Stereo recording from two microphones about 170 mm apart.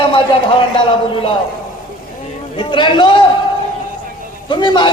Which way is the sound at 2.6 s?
30° left (ahead or behind).